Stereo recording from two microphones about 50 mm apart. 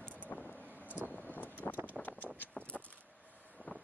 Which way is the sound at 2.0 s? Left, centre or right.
Left.